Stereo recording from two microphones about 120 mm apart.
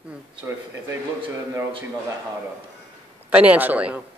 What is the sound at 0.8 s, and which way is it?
Speech, 25° right (ahead or behind).